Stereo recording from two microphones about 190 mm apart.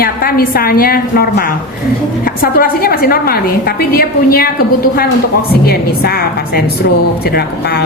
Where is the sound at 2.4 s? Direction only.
50° left (ahead or behind).